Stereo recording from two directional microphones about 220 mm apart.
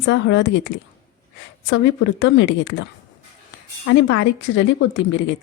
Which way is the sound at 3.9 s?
55° left (ahead or behind).